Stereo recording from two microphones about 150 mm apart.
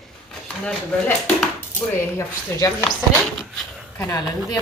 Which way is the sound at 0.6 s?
5° left (ahead or behind).